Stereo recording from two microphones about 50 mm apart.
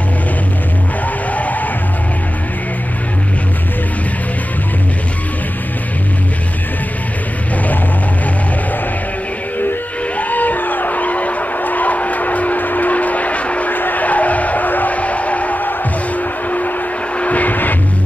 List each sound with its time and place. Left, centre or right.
1.3 s music: left
10.1 s vehicle: left
16.4 s music: left
17.2 s vehicle: left